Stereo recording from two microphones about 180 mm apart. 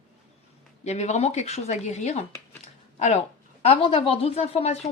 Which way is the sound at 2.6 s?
40° left (ahead or behind).